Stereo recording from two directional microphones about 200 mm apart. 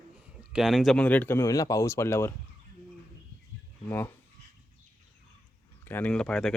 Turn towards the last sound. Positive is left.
turn(degrees=5)  # may be behind; listen again after turning